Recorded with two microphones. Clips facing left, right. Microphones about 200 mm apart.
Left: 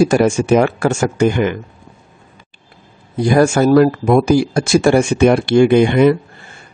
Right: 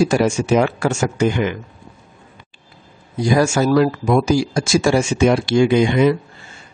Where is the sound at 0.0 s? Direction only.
55° left (ahead or behind).